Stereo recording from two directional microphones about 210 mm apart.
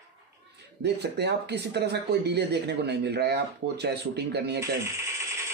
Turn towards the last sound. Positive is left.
turn(degrees=-15)  # may be behind; listen again after turning